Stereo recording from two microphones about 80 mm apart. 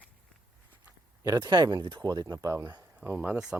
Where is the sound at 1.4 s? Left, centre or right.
Right.